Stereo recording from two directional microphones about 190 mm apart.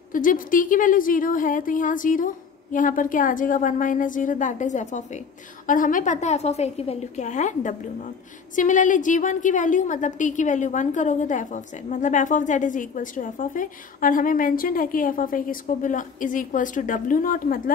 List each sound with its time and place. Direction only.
0.1 s a woman's voice: 45° left (ahead or behind)